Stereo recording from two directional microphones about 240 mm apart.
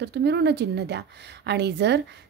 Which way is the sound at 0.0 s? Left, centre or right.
Right.